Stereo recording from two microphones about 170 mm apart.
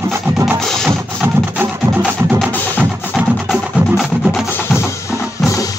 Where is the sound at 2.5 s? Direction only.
10° left (ahead or behind).